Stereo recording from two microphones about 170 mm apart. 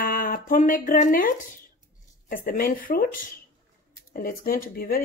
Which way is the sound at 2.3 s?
55° left (ahead or behind).